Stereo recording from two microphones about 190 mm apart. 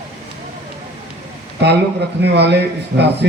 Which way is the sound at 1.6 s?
65° right (ahead or behind).